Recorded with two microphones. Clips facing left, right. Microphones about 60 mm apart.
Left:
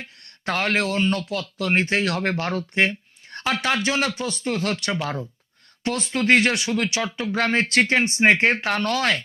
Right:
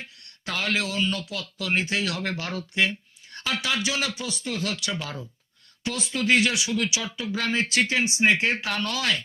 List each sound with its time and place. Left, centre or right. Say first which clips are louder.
0.2 s speech: left 6 dB; left